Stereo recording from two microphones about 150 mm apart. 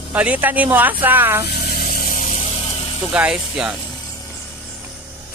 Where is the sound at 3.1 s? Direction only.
5° right (ahead or behind).